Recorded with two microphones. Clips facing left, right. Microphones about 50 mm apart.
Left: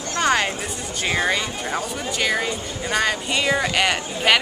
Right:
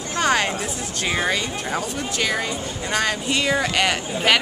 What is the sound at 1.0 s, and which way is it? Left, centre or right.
Speech, centre.